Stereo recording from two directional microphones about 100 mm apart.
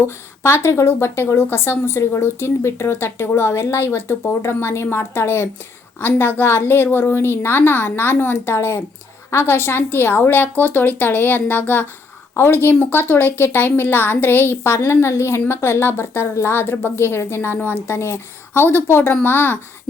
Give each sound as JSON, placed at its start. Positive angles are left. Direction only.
{"t": 0.4, "sound": "a woman's voice", "side_deg": 25}